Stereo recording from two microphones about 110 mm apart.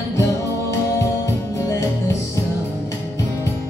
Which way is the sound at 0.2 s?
30° left (ahead or behind).